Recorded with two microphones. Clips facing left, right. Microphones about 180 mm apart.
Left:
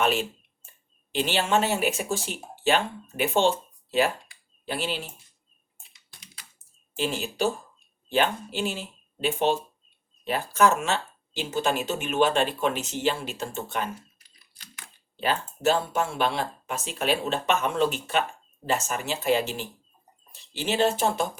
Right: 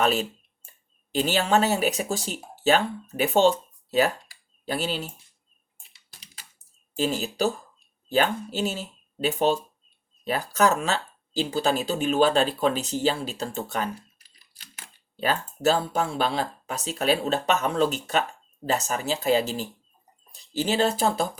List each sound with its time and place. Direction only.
0.0 s speech: 40° right (ahead or behind)
6.9 s speech: 40° right (ahead or behind)
15.1 s speech: 40° right (ahead or behind)